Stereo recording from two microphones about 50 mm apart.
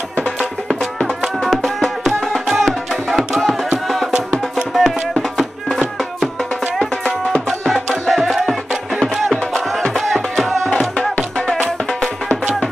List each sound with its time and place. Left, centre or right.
0.7 s music: centre
7.4 s music: centre
11.3 s music: centre